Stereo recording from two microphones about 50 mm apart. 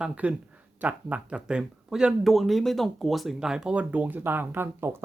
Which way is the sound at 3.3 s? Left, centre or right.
Centre.